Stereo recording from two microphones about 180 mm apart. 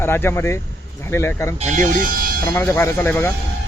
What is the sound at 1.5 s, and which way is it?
Speech, 40° right (ahead or behind).